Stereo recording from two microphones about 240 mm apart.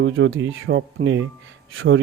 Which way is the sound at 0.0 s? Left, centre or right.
Right.